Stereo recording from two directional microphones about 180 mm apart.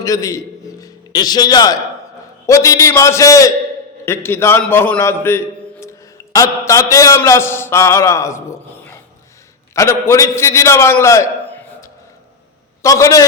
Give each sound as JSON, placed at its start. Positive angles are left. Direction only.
{"t": 0.0, "sound": "a man's voice", "side_deg": 20}